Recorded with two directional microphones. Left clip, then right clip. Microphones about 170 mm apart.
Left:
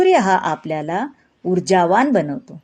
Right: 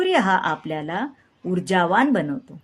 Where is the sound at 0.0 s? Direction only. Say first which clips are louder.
Left 5 dB; 20° left (ahead or behind).